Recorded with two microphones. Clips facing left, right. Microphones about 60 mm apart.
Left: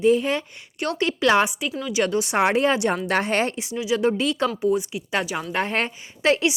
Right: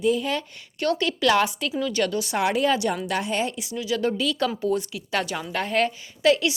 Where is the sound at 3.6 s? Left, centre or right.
Left.